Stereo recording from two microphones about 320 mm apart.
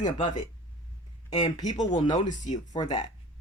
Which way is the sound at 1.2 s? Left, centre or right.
Left.